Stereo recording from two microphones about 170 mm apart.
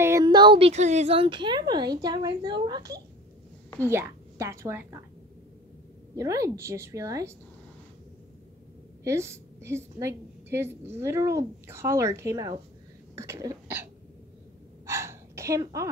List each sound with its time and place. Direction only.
0.0 s a woman's voice: 20° right (ahead or behind)
6.1 s a woman's voice: 20° right (ahead or behind)
9.0 s a woman's voice: 15° right (ahead or behind)
13.1 s cough: 15° right (ahead or behind)
14.9 s a sound: 15° right (ahead or behind)